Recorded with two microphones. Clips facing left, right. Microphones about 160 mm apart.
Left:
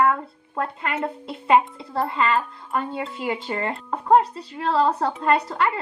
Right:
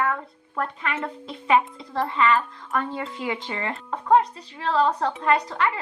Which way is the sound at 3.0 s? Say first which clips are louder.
Left 2 dB; 5° left (ahead or behind).